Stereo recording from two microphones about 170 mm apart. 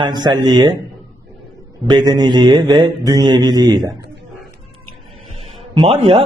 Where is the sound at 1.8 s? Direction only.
25° right (ahead or behind).